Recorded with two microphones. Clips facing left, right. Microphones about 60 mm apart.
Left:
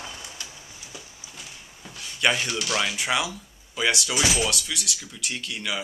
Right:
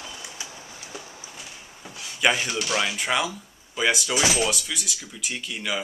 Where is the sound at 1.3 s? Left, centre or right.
Centre.